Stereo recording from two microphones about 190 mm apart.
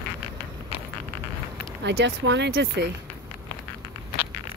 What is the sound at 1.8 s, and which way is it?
Speech, 65° right (ahead or behind).